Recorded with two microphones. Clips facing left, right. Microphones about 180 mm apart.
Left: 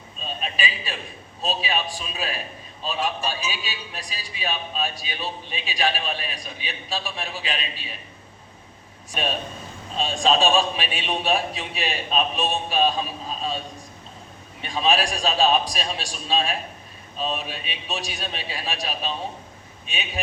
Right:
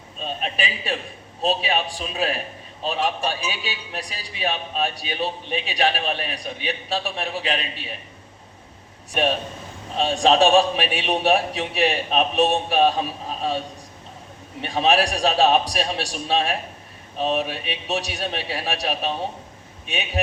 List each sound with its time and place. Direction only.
0.2 s a man's voice: 65° right (ahead or behind)
9.1 s a man's voice: 70° right (ahead or behind)
14.6 s a man's voice: 65° right (ahead or behind)